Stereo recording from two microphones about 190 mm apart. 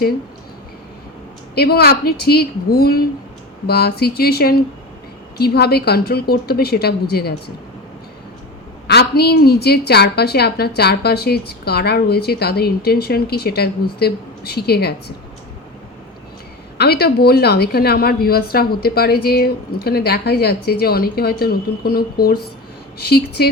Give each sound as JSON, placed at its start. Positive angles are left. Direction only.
{"t": 1.5, "sound": "a woman's voice", "side_deg": 55}
{"t": 8.9, "sound": "a woman's voice", "side_deg": 60}
{"t": 16.7, "sound": "a woman's voice", "side_deg": 55}